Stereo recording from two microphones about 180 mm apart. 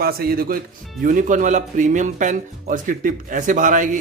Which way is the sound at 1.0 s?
45° right (ahead or behind).